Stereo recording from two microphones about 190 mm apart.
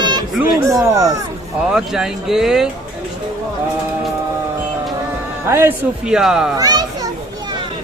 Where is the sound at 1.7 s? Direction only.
5° right (ahead or behind).